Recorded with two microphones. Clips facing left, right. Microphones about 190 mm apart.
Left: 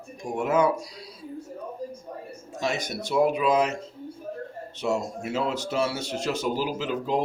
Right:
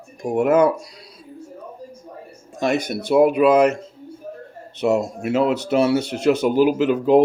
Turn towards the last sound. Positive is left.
turn(degrees=-60)  # may be behind; listen again after turning